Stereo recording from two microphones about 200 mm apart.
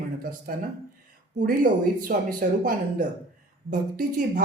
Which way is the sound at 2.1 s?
45° right (ahead or behind).